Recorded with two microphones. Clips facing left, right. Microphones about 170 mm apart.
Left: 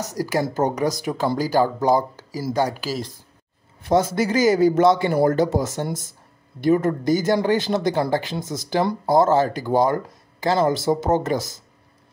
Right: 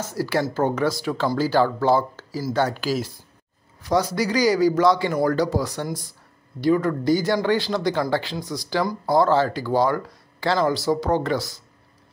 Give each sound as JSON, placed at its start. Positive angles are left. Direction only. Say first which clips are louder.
{"t": 0.2, "sound": "speech", "louder": "even", "side_deg": 15}
{"t": 3.8, "sound": "speech", "louder": "left 2 dB", "side_deg": 25}